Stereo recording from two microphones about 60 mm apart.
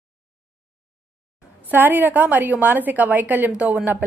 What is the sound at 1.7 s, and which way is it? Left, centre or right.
A woman's voice, right.